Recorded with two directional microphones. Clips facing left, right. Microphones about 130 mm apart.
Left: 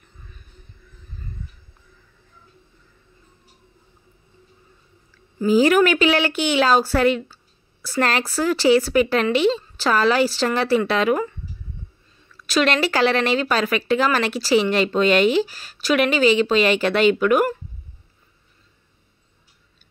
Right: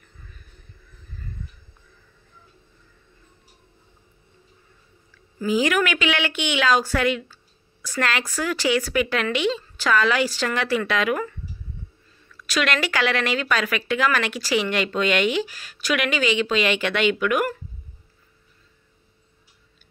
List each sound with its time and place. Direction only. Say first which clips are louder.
5.5 s speech: left 6 dB; 35° left (ahead or behind)